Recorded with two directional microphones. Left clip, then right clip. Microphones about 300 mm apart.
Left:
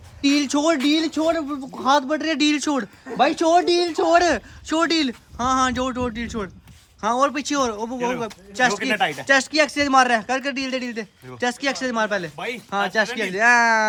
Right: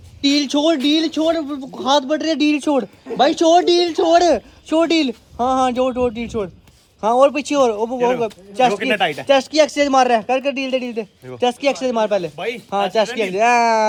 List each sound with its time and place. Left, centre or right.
0.2 s speech: centre
0.5 s speech: left
0.9 s speech: centre
1.1 s speech: left; by 13.8 s centre